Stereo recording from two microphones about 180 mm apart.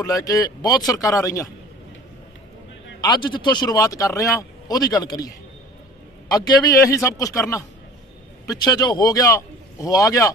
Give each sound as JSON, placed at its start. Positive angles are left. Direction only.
{"t": 0.0, "sound": "a man's voice", "side_deg": 20}
{"t": 3.0, "sound": "a man's voice", "side_deg": 25}